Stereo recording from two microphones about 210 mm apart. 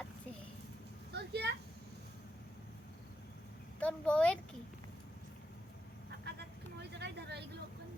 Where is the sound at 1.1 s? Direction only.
50° right (ahead or behind).